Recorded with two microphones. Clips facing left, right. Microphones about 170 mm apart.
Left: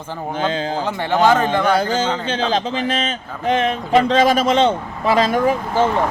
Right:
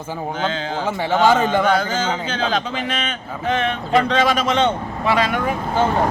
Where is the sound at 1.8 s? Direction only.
35° left (ahead or behind).